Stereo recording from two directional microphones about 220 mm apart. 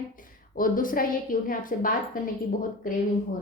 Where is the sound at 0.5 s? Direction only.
40° left (ahead or behind).